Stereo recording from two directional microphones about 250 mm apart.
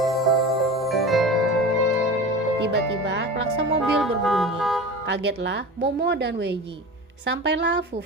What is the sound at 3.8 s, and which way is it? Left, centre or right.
Music, centre.